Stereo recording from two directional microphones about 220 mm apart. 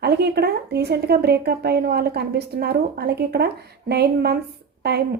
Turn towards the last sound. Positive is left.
turn(degrees=-50)  # may be behind; listen again after turning